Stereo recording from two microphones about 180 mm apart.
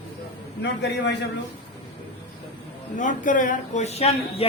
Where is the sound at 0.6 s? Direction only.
75° left (ahead or behind).